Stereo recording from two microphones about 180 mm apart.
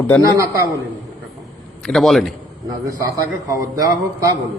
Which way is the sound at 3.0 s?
20° right (ahead or behind).